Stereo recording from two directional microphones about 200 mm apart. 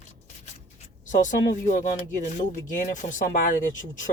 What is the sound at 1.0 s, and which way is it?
Speech, 40° left (ahead or behind).